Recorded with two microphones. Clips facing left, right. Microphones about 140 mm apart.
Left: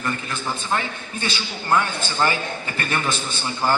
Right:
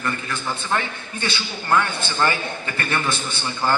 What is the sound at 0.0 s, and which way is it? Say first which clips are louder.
A man's voice: even; 20° left (ahead or behind).